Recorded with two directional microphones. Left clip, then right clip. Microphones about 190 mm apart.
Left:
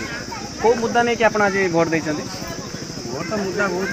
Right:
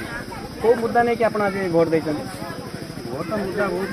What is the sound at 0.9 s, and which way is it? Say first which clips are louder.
Speech: left 2 dB; 20° right (ahead or behind).